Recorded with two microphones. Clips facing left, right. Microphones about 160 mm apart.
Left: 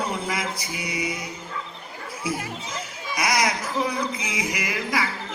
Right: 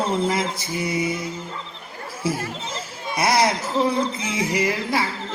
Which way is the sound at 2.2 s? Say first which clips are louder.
Right 4 dB; 30° right (ahead or behind).